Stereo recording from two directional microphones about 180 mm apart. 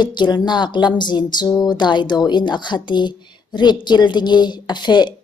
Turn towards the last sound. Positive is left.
turn(degrees=25)  # may be behind; listen again after turning